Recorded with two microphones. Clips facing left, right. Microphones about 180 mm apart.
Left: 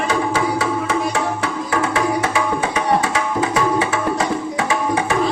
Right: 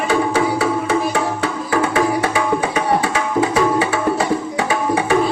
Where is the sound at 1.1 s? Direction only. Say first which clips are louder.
Right 1 dB; 30° right (ahead or behind).